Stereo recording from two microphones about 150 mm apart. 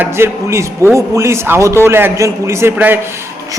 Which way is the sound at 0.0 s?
15° right (ahead or behind).